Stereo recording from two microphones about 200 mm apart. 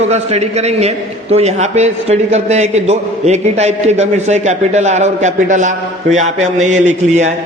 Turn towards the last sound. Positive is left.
turn(degrees=-35)  # may be behind; listen again after turning